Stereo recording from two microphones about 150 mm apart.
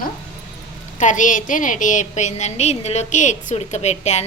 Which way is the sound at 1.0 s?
55° left (ahead or behind).